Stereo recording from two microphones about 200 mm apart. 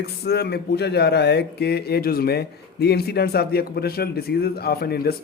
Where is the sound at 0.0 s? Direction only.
55° left (ahead or behind).